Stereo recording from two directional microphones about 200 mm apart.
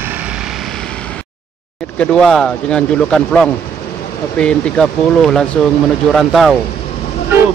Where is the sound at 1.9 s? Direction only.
5° left (ahead or behind).